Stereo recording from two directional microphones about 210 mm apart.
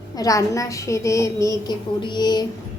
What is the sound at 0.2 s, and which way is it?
A woman's voice, 15° left (ahead or behind).